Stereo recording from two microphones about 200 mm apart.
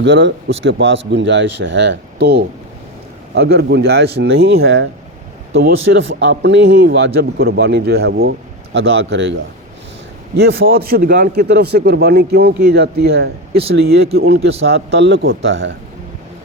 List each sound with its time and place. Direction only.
0.0 s a man's voice: 60° right (ahead or behind)
6.0 s a man's voice: 60° right (ahead or behind)
10.6 s a man's voice: 50° right (ahead or behind)
14.7 s speech: 60° right (ahead or behind)